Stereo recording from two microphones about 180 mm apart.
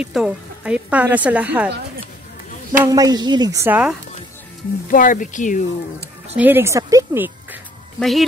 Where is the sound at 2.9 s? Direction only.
20° right (ahead or behind).